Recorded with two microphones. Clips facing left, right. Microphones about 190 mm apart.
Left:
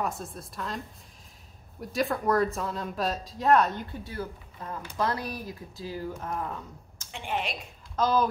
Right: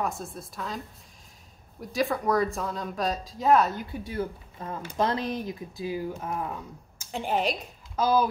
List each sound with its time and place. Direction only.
0.0 s speech: centre (ahead or behind)
7.1 s a woman's voice: 40° right (ahead or behind)
7.9 s speech: 10° right (ahead or behind)